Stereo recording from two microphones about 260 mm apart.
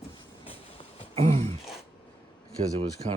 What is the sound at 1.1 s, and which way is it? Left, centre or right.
Throat clearing, right.